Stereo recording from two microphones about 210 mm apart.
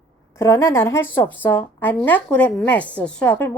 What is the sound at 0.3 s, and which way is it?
A woman's voice, 15° left (ahead or behind).